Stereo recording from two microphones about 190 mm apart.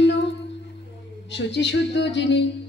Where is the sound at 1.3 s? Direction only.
70° left (ahead or behind).